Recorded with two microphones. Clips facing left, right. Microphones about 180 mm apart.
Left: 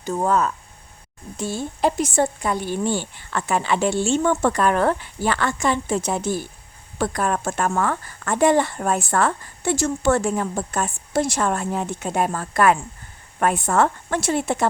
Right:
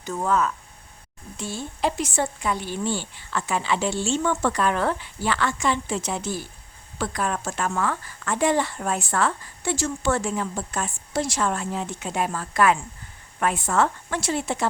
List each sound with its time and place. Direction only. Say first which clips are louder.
0.0 s a woman's voice: left 3 dB; 40° left (ahead or behind); by 14.7 s 55° left (ahead or behind)